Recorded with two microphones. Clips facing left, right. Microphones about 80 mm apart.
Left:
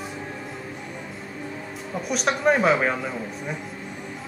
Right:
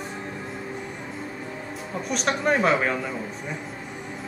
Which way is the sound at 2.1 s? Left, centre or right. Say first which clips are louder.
Left 2 dB; centre.